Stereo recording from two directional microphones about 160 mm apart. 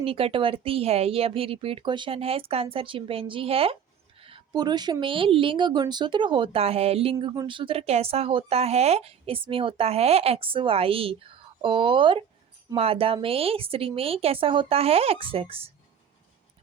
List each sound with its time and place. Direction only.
0.0 s a woman's voice: 35° right (ahead or behind)